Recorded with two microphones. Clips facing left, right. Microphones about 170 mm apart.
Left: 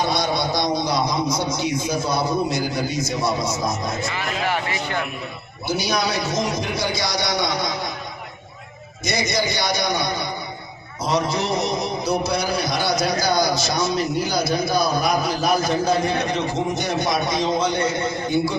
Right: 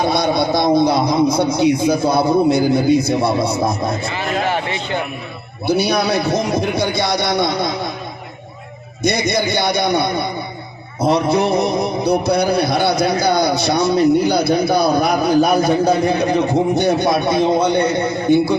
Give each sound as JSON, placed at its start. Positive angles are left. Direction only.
{"t": 0.0, "sound": "a man's voice", "side_deg": -55}
{"t": 4.1, "sound": "a man's voice", "side_deg": -30}
{"t": 5.6, "sound": "a man's voice", "side_deg": -60}
{"t": 9.0, "sound": "a man's voice", "side_deg": -60}